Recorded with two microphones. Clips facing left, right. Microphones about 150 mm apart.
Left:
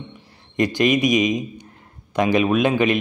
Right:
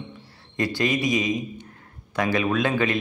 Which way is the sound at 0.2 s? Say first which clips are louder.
Left 6 dB; 15° left (ahead or behind).